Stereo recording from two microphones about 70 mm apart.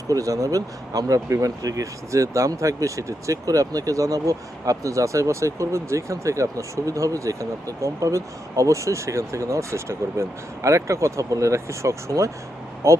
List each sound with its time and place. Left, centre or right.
0.1 s speech: right